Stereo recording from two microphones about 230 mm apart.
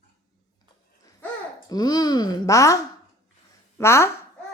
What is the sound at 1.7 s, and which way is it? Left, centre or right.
Speech, centre.